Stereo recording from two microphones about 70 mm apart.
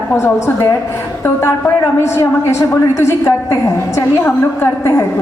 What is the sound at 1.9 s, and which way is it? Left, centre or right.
A woman's voice, left.